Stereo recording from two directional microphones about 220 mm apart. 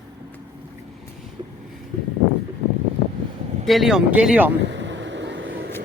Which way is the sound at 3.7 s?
Centre (ahead or behind).